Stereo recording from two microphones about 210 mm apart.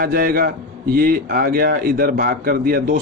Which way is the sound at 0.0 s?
45° right (ahead or behind).